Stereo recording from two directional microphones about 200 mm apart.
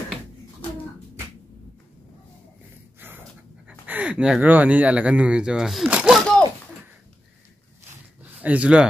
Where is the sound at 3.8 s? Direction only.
5° right (ahead or behind).